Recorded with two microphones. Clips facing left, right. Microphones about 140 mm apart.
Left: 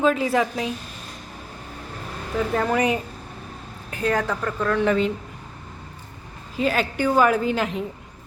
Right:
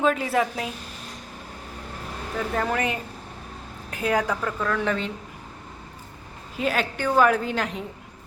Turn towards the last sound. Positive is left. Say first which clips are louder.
# left 3 dB
turn(degrees=5)  # may be behind; listen again after turning